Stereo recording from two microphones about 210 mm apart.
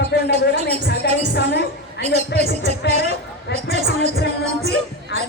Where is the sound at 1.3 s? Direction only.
55° left (ahead or behind).